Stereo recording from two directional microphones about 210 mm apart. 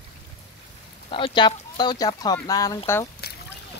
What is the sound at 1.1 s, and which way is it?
Speech, 25° left (ahead or behind).